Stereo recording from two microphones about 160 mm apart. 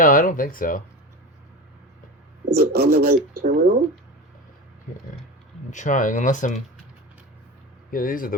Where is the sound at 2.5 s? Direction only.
75° right (ahead or behind).